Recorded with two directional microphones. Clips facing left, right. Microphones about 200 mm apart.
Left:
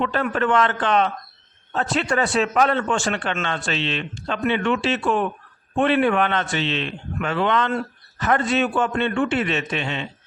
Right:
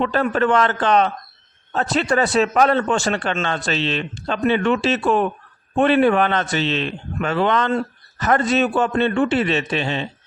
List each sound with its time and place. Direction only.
0.0 s a man's voice: 35° right (ahead or behind)